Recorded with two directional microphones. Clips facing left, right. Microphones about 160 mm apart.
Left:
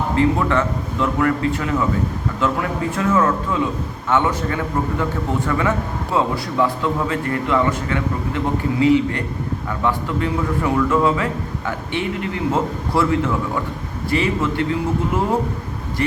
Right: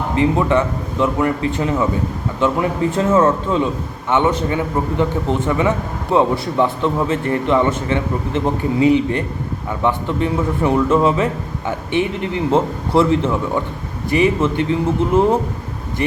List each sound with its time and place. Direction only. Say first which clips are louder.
0.2 s a man's voice: right 3 dB; 20° right (ahead or behind)